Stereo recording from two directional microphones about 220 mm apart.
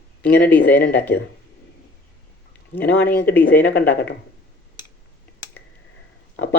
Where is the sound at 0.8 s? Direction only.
50° left (ahead or behind).